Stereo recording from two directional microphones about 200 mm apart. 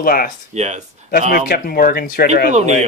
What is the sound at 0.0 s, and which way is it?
Speech, 45° left (ahead or behind).